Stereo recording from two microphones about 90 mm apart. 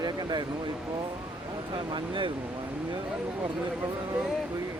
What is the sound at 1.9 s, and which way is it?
Speech, 65° right (ahead or behind).